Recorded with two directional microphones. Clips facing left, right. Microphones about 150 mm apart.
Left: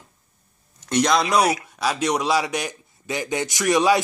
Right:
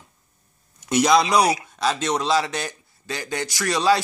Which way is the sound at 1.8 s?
10° left (ahead or behind).